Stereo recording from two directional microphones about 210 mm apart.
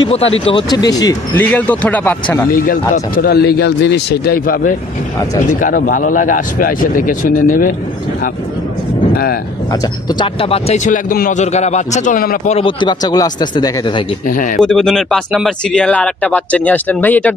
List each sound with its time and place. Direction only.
0.0 s speech: 30° left (ahead or behind); by 2.1 s 10° left (ahead or behind)
2.5 s speech: 40° left (ahead or behind)
9.1 s speech: 45° left (ahead or behind)
9.7 s speech: 20° left (ahead or behind); by 12.5 s 40° left (ahead or behind)
12.5 s speech: 25° left (ahead or behind)
14.2 s speech: 40° left (ahead or behind)
14.6 s speech: centre (ahead or behind)